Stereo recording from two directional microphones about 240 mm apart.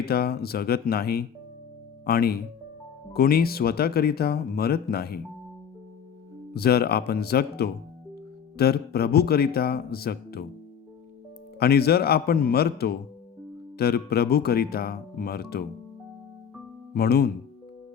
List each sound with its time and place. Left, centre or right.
0.0 s speech: left
6.5 s speech: left
11.6 s speech: left
16.9 s speech: left